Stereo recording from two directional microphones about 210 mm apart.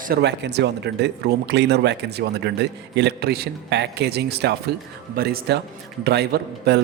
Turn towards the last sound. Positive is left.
turn(degrees=-50)  # may be behind; listen again after turning